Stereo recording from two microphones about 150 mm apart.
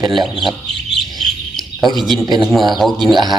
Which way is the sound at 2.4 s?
Centre (ahead or behind).